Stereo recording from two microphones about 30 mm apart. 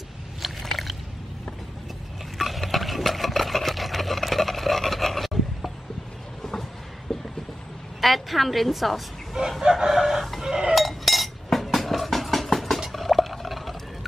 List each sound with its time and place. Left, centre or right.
0.4 s a sound: centre
2.3 s stir: centre
7.1 s a sound: left
8.0 s a woman's voice: centre
9.6 s chicken: right
10.4 s chink: centre
10.7 s chink: centre
12.9 s stir: centre